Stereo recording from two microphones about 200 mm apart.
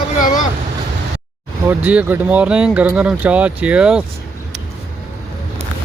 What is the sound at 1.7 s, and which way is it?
Speech, 10° right (ahead or behind).